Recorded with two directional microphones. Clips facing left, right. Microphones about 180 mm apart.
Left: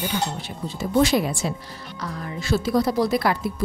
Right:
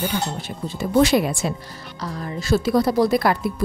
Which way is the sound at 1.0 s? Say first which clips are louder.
Right 3 dB; 65° right (ahead or behind).